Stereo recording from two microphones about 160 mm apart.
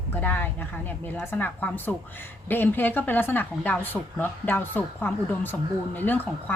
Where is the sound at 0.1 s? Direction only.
10° left (ahead or behind).